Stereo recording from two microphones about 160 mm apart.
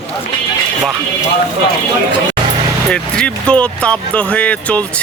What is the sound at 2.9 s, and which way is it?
Speech, 5° left (ahead or behind).